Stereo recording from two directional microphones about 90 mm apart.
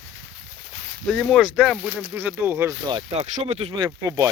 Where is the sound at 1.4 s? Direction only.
10° right (ahead or behind).